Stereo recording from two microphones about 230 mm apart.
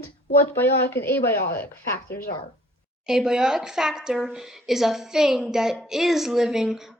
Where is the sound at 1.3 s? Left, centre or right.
Left.